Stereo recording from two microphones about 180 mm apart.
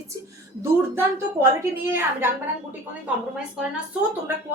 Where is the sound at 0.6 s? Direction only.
15° right (ahead or behind).